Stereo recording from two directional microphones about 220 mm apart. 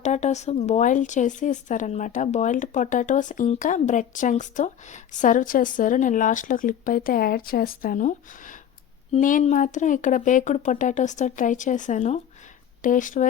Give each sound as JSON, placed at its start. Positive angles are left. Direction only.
{"t": 0.0, "sound": "speech", "side_deg": 30}